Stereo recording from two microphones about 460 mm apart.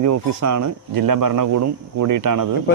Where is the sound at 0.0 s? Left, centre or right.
Right.